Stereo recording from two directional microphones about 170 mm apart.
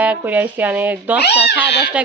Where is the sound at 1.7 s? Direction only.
90° left.